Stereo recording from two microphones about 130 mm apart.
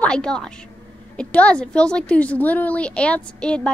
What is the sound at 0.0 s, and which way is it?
A woman's voice, 5° left (ahead or behind).